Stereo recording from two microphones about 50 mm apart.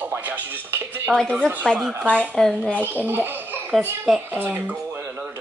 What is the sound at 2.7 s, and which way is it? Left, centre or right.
Speech, right.